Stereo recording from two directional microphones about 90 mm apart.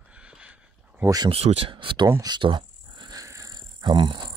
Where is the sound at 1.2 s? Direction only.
90° right; by 2.1 s 70° right (ahead or behind).